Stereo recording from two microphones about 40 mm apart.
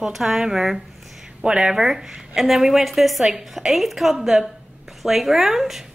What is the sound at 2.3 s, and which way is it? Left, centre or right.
A woman's voice, centre.